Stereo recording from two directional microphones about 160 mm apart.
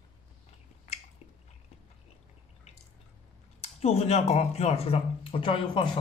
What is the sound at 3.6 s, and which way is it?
Speech, 40° left (ahead or behind).